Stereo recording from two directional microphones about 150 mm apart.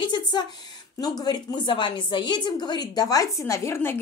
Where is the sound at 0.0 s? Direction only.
30° left (ahead or behind).